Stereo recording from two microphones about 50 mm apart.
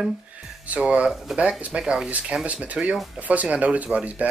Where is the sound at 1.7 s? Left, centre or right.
Centre.